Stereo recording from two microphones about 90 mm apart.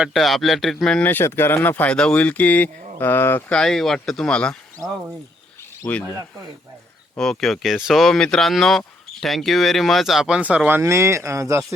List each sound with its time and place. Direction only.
0.1 s speech: centre (ahead or behind)
1.0 s speech: 25° left (ahead or behind)
3.5 s speech: 5° left (ahead or behind)
5.8 s speech: 30° left (ahead or behind)
7.2 s speech: 5° left (ahead or behind)
10.7 s speech: 25° right (ahead or behind)